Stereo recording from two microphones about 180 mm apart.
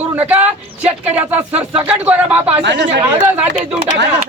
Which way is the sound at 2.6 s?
75° right (ahead or behind).